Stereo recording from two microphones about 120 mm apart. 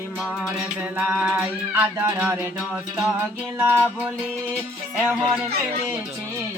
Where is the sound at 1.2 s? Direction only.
10° right (ahead or behind).